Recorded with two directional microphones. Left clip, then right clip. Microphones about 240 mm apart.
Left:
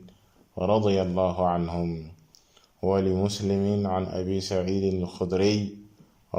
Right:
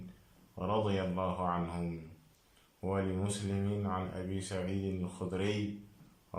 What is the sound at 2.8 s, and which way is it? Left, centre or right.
Mantra, left.